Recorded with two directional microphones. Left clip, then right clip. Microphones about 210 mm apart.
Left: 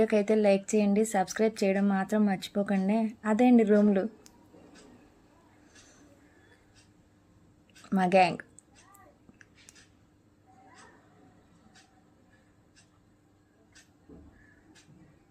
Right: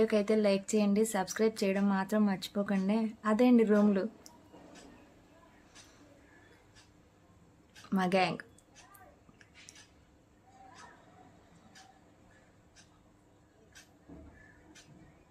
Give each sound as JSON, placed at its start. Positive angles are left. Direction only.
{"t": 0.0, "sound": "speech", "side_deg": 10}
{"t": 7.9, "sound": "speech", "side_deg": 10}